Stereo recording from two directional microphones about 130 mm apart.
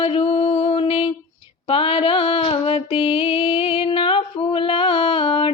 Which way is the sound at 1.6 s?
45° left (ahead or behind).